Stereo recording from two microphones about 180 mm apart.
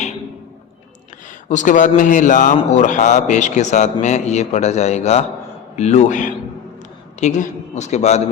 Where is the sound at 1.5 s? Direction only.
45° left (ahead or behind).